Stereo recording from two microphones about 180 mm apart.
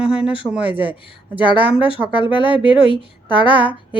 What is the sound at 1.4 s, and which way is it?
Speech, 25° left (ahead or behind).